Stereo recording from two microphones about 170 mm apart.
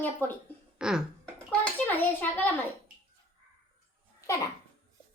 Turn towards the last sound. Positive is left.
turn(degrees=20)  # may be behind; listen again after turning